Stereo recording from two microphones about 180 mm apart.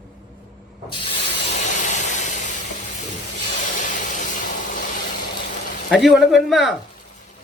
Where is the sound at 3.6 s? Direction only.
45° left (ahead or behind).